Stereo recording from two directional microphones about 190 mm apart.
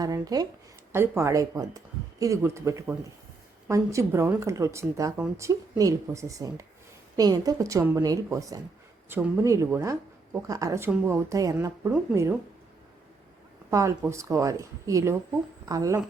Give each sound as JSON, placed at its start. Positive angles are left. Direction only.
{"t": 0.0, "sound": "speech", "side_deg": -20}
{"t": 13.7, "sound": "speech", "side_deg": -15}